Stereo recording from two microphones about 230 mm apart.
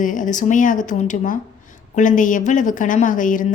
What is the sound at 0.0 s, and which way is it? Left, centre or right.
A woman's voice, left.